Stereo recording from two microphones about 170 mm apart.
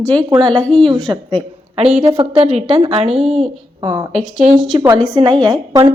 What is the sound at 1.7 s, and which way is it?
A woman's voice, 35° right (ahead or behind).